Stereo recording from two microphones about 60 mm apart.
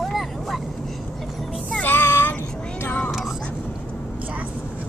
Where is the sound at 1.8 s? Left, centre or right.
Left.